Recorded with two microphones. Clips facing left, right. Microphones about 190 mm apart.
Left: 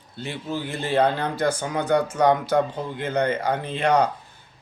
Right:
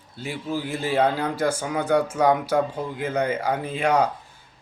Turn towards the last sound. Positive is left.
turn(degrees=-5)  # may be behind; listen again after turning